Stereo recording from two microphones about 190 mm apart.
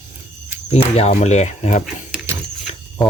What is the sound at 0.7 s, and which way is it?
Speech, 35° left (ahead or behind).